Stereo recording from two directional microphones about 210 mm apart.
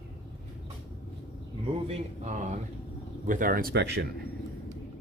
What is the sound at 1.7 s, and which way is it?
Speech, 30° right (ahead or behind).